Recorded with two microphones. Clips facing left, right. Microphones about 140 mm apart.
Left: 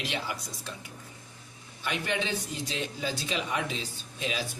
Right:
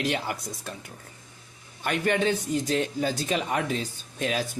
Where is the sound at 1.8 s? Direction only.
50° right (ahead or behind).